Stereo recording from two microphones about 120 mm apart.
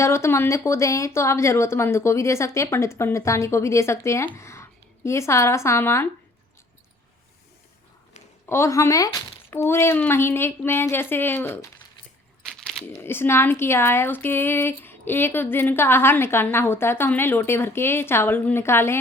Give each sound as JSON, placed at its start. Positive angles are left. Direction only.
{"t": 0.0, "sound": "speech", "side_deg": 25}
{"t": 8.4, "sound": "speech", "side_deg": 25}
{"t": 12.4, "sound": "a sound", "side_deg": 5}
{"t": 13.0, "sound": "speech", "side_deg": 20}